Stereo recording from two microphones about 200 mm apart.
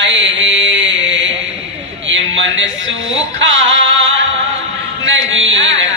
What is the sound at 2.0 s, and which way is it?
A man's voice, 70° right (ahead or behind).